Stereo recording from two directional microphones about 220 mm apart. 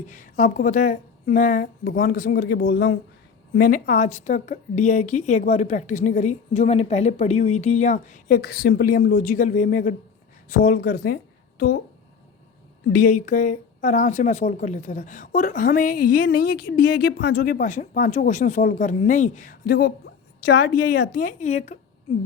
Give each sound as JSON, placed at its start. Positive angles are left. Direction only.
{"t": 0.1, "sound": "speech", "side_deg": 35}
{"t": 12.9, "sound": "a woman's voice", "side_deg": 40}